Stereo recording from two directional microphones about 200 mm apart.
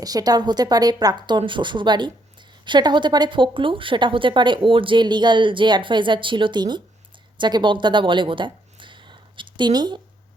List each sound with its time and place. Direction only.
0.0 s speech: 20° right (ahead or behind)